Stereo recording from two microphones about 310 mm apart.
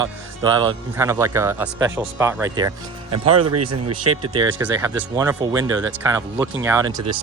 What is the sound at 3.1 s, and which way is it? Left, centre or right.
Speech, right.